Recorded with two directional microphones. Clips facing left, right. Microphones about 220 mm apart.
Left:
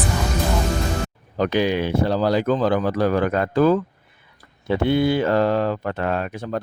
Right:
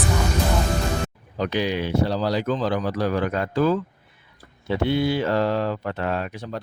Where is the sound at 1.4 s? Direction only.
50° left (ahead or behind).